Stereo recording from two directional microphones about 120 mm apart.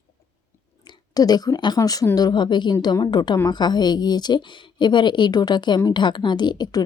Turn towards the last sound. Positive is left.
turn(degrees=35)  # may be behind; listen again after turning